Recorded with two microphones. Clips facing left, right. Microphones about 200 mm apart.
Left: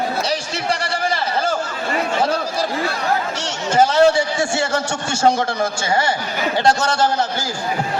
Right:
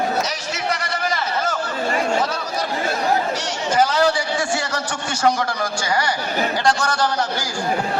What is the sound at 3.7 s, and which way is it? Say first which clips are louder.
A man's voice: left 4 dB; 25° left (ahead or behind).